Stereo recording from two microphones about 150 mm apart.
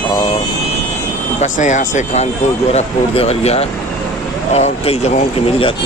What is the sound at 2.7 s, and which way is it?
Speech, 45° left (ahead or behind).